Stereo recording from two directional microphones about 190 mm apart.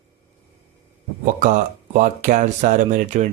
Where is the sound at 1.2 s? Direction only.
45° right (ahead or behind).